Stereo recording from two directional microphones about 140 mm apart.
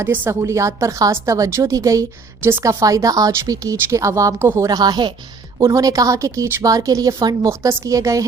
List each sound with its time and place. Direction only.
0.0 s a woman's voice: 20° right (ahead or behind)